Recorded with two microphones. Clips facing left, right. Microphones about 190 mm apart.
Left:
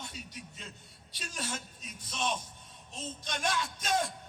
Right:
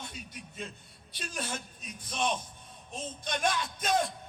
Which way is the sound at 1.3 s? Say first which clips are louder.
Right 2 dB; 55° right (ahead or behind).